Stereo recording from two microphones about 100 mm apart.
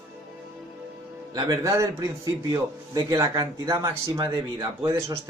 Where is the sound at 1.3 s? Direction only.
35° right (ahead or behind).